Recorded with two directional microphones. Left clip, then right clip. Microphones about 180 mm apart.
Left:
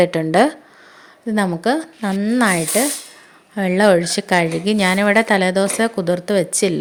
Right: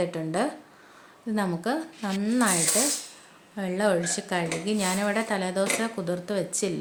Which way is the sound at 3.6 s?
45° left (ahead or behind).